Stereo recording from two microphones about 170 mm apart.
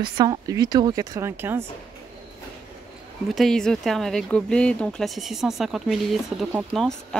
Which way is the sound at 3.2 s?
Centre (ahead or behind).